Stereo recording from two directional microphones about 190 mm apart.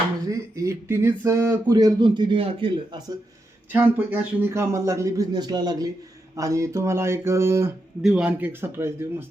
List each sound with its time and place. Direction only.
0.3 s speech: 15° right (ahead or behind)
3.7 s speech: 10° right (ahead or behind)